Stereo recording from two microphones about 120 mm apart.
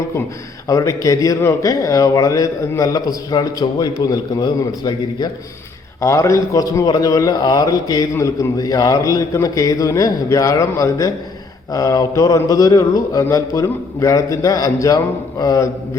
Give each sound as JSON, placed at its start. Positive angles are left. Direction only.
{"t": 0.7, "sound": "a man's voice", "side_deg": 25}